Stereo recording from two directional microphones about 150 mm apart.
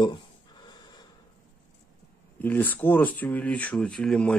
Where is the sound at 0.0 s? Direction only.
30° left (ahead or behind).